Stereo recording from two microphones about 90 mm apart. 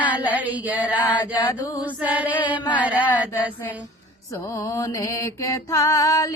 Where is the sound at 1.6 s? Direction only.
45° left (ahead or behind).